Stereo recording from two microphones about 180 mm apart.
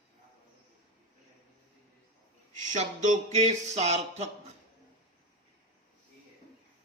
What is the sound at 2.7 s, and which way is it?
A man's voice, 40° right (ahead or behind).